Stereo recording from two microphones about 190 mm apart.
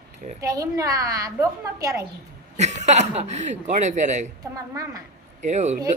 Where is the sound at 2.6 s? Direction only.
35° right (ahead or behind).